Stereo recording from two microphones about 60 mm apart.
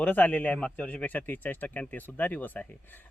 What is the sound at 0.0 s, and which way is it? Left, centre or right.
Speech, left.